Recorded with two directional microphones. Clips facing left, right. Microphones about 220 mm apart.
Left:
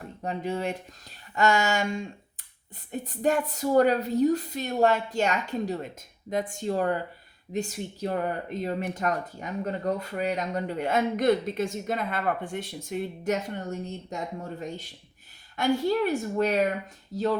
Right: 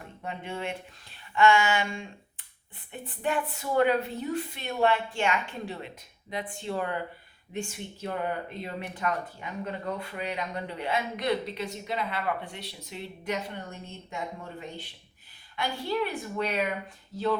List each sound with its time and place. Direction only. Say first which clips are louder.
0.2 s a woman's voice: left 6 dB; 40° left (ahead or behind)